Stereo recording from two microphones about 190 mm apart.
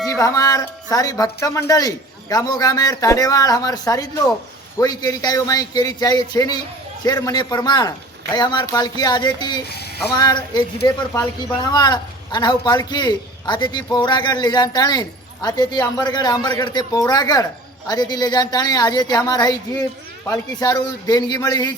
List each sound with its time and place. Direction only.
0.0 s a man's voice: 15° left (ahead or behind)